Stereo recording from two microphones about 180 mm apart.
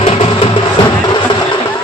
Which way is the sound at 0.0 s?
30° left (ahead or behind).